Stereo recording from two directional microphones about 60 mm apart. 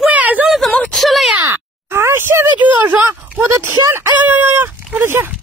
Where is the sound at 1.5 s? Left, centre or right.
Right.